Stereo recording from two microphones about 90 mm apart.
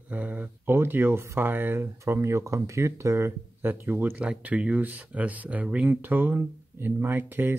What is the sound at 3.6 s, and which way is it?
Speech, 20° right (ahead or behind).